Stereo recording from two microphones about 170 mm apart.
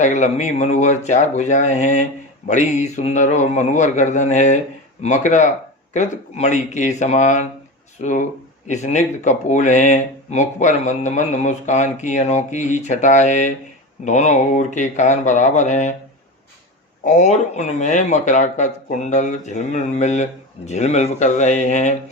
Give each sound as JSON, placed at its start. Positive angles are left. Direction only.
{"t": 0.0, "sound": "speech", "side_deg": 45}
{"t": 17.1, "sound": "speech", "side_deg": 45}